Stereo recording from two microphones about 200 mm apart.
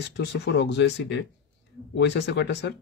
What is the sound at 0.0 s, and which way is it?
Speech, 60° left (ahead or behind).